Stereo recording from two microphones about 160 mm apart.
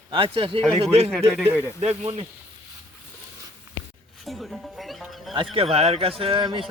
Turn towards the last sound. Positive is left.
turn(degrees=-30)  # may be behind; listen again after turning